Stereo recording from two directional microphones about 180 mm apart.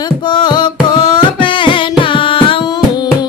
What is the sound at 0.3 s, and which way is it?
Music, 25° left (ahead or behind).